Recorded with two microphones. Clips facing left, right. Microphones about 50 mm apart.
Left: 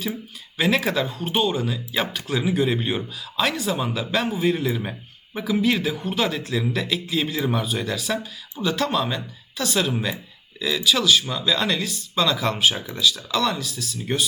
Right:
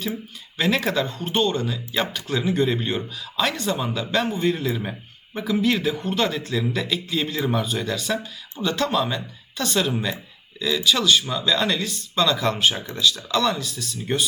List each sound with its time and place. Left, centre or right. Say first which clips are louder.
0.5 s speech: left 1 dB; centre